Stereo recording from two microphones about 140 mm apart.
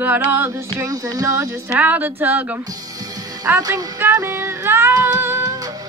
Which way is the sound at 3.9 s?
15° right (ahead or behind).